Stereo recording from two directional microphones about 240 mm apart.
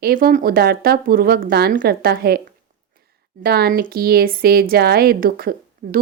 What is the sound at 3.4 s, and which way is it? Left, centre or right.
A woman's voice, right.